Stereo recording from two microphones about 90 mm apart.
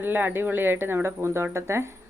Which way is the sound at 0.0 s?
20° right (ahead or behind).